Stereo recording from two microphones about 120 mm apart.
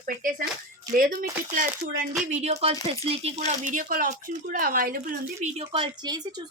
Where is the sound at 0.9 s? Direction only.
30° right (ahead or behind).